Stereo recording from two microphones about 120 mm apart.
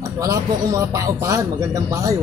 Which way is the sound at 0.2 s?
25° right (ahead or behind).